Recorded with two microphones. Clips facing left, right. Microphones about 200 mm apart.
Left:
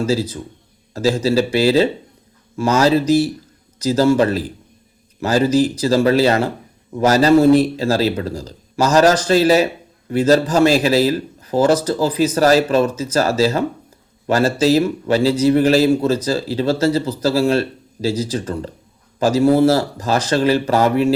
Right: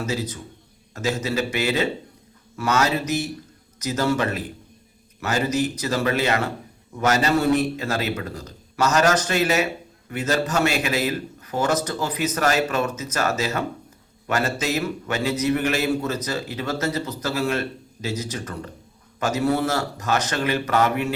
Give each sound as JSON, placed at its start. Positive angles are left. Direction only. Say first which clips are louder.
{"t": 0.0, "sound": "a man's voice", "louder": "left 8 dB", "side_deg": 30}